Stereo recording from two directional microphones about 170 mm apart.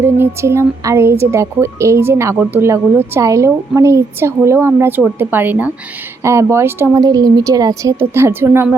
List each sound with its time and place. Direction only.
0.0 s speech: 15° right (ahead or behind)